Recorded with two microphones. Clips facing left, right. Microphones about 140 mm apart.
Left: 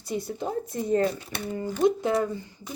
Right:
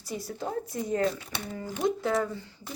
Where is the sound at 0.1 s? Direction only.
25° left (ahead or behind).